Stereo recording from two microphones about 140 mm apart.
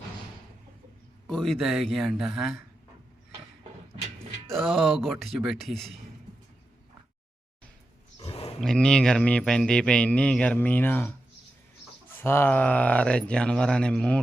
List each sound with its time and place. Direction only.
1.3 s speech: 5° left (ahead or behind)
4.4 s speech: centre (ahead or behind)
8.2 s roaring cats: 40° left (ahead or behind)
8.6 s speech: 5° left (ahead or behind)